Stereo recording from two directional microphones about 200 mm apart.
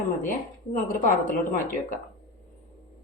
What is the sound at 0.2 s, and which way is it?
A woman's voice, 40° left (ahead or behind).